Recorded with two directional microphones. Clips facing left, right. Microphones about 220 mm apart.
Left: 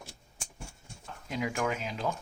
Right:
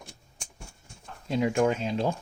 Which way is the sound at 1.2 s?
30° right (ahead or behind).